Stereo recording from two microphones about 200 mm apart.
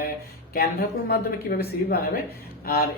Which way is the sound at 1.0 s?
50° left (ahead or behind).